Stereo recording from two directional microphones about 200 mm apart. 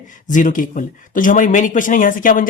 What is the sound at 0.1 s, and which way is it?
Speech, 40° left (ahead or behind).